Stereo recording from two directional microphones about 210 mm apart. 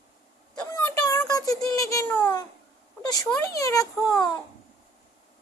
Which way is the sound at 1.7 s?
15° left (ahead or behind).